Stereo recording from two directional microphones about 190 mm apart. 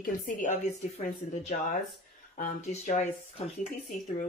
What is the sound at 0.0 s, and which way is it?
A woman's voice, 40° left (ahead or behind).